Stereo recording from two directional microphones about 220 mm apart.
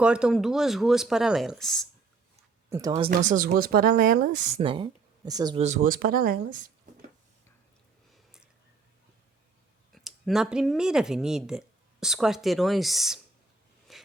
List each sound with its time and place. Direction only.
0.0 s speech: 5° right (ahead or behind)
2.6 s speech: 15° right (ahead or behind)
3.1 s speech: 35° right (ahead or behind)
4.6 s speech: 25° right (ahead or behind)
5.6 s speech: 35° right (ahead or behind)
8.1 s a sound: centre (ahead or behind)
9.9 s speech: centre (ahead or behind)
13.9 s a sound: centre (ahead or behind)